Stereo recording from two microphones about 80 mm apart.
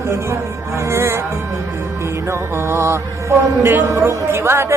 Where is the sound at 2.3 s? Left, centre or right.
Right.